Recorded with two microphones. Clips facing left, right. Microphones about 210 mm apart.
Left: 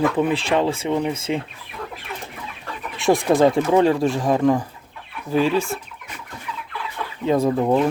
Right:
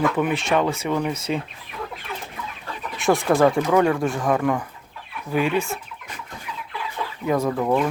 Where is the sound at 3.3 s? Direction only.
20° left (ahead or behind).